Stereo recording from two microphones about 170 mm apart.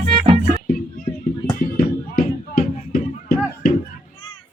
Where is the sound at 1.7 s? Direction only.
60° left (ahead or behind).